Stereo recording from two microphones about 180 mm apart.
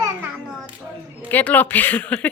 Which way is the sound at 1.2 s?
10° left (ahead or behind).